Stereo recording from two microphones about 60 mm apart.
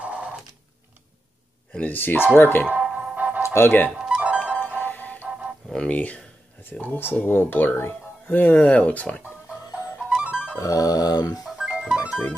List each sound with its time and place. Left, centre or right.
0.0 s a sound: centre
1.7 s speech: left
2.8 s music: centre
3.4 s speech: left
3.9 s music: centre
4.2 s music: centre
4.6 s music: left
5.7 s speech: centre
6.8 s speech: left
8.4 s speech: left
10.0 s music: centre
10.6 s music: left
11.4 s music: centre